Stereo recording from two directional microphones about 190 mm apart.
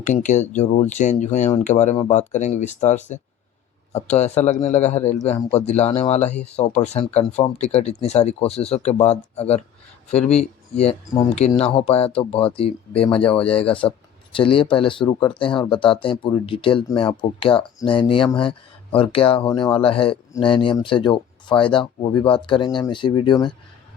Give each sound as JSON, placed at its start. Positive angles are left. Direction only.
{"t": 0.0, "sound": "speech", "side_deg": 40}